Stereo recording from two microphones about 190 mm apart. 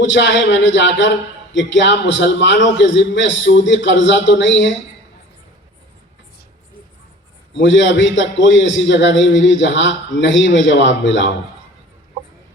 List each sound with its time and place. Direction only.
0.0 s a man's voice: 70° left (ahead or behind)
7.5 s a man's voice: 70° left (ahead or behind)